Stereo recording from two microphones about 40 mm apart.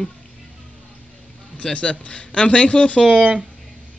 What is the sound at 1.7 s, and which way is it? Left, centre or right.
Speech, left.